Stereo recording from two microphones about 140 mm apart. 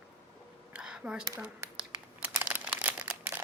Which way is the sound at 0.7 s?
5° right (ahead or behind).